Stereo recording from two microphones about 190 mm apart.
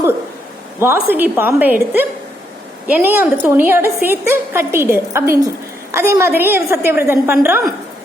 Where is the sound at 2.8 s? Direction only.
10° right (ahead or behind).